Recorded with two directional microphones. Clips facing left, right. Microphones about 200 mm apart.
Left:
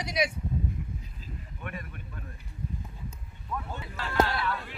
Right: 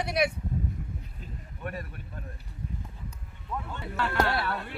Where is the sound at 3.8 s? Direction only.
55° right (ahead or behind).